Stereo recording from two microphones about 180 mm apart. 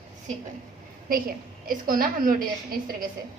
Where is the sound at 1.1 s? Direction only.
55° right (ahead or behind).